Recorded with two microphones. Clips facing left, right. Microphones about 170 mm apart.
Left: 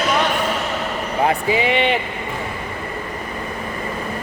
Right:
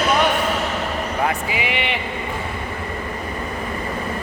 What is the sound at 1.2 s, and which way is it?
Speech, 30° left (ahead or behind).